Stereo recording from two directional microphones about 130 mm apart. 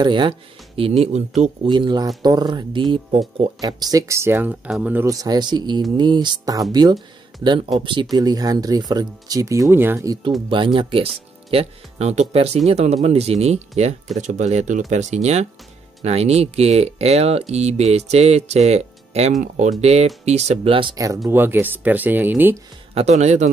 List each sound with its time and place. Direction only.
0.0 s speech: 35° right (ahead or behind); by 1.7 s 55° right (ahead or behind)
1.7 s speech: 35° right (ahead or behind); by 4.6 s 15° right (ahead or behind)
4.6 s speech: 5° right (ahead or behind)
4.9 s speech: 25° right (ahead or behind)
10.5 s speech: 40° right (ahead or behind)
11.5 s speech: 55° right (ahead or behind)
20.9 s speech: 25° right (ahead or behind)
21.3 s speech: 15° right (ahead or behind)
22.9 s speech: 60° right (ahead or behind)